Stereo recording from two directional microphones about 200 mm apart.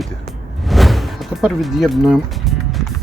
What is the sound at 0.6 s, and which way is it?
Music, centre (ahead or behind).